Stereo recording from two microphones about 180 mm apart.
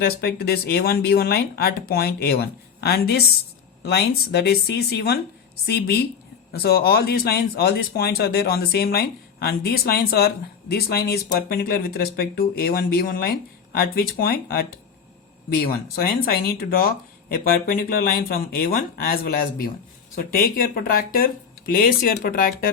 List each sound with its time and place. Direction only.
0.0 s speech: 60° left (ahead or behind)